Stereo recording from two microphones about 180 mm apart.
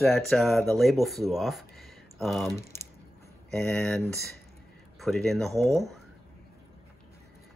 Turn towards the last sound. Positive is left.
turn(degrees=0)  # may be behind; listen again after turning